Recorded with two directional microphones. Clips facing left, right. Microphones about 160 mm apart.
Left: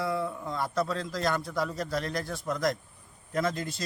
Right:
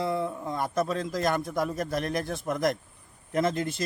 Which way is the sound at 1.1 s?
50° right (ahead or behind).